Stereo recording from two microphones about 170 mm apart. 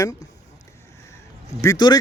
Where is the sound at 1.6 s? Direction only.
20° left (ahead or behind).